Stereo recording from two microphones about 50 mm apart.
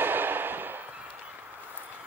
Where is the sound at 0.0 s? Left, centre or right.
Right.